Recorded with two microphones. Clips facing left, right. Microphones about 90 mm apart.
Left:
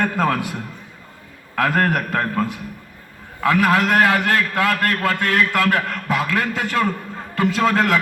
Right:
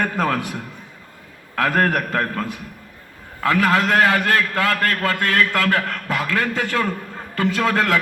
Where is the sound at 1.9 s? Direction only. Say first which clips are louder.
Left 1 dB; 15° left (ahead or behind).